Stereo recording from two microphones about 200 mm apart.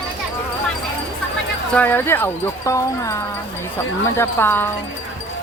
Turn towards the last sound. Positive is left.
turn(degrees=10)  # may be behind; listen again after turning